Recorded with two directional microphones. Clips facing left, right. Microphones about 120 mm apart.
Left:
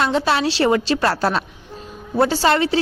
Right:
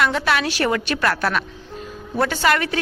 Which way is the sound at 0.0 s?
25° left (ahead or behind).